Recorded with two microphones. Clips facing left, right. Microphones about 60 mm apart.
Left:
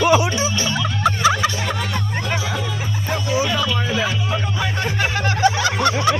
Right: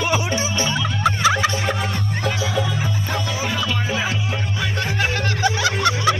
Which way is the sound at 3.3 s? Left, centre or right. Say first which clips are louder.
Left 5 dB; left.